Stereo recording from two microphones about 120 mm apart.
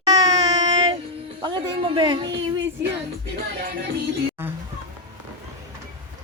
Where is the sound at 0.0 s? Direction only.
30° right (ahead or behind).